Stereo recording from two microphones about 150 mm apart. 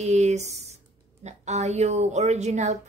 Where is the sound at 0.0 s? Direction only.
50° right (ahead or behind).